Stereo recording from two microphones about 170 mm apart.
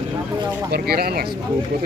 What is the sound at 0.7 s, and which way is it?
Speech, 65° right (ahead or behind).